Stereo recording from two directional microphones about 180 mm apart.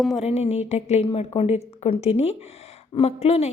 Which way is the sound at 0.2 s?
35° left (ahead or behind).